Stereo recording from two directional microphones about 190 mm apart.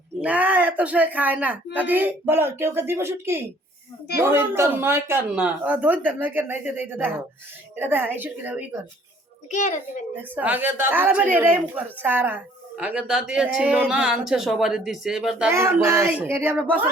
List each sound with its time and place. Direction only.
0.2 s speech: 5° right (ahead or behind)
9.5 s a child's voice: 40° left (ahead or behind)
10.2 s speech: 10° right (ahead or behind)